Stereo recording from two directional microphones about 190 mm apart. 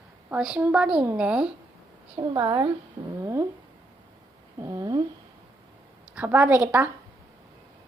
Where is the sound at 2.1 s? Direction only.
20° right (ahead or behind).